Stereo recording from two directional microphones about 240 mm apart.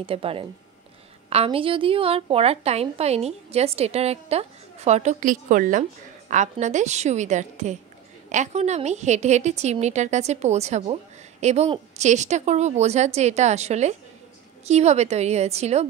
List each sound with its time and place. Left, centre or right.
0.0 s a woman's voice: right